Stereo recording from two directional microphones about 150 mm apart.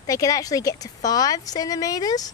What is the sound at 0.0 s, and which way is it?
A woman's voice, 25° left (ahead or behind).